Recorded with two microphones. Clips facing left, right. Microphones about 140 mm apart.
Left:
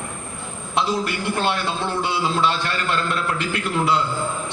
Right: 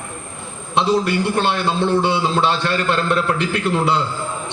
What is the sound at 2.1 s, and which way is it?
A man's voice, 30° right (ahead or behind).